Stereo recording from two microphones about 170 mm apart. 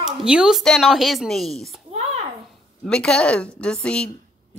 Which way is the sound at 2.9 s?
5° left (ahead or behind).